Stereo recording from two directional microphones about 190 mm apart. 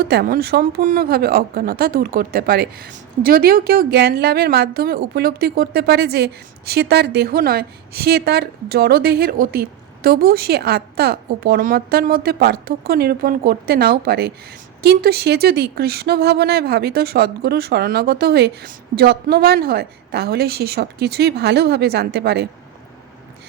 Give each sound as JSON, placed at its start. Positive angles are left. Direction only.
{"t": 0.0, "sound": "a woman's voice", "side_deg": -55}